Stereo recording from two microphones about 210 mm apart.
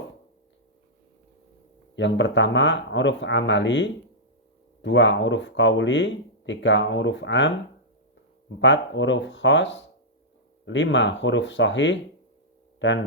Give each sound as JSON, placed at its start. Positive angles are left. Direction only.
{"t": 2.0, "sound": "speech", "side_deg": 60}
{"t": 8.5, "sound": "speech", "side_deg": 60}